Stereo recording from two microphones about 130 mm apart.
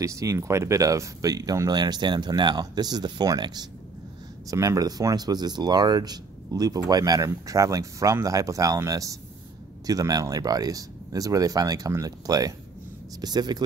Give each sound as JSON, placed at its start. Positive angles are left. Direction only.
{"t": 0.0, "sound": "speech", "side_deg": -25}